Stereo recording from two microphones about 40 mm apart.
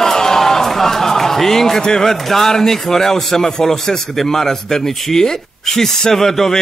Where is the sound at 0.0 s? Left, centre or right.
Centre.